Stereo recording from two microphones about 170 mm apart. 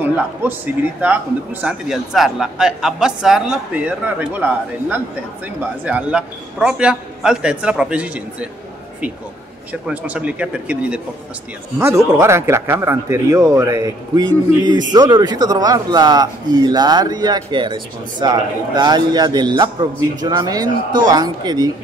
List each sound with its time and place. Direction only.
0.0 s a man's voice: 10° right (ahead or behind)
9.7 s a man's voice: 10° right (ahead or behind)
12.2 s a man's voice: 15° right (ahead or behind)